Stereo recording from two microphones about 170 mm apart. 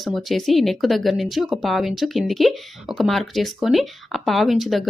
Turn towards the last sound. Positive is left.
turn(degrees=0)  # may be behind; listen again after turning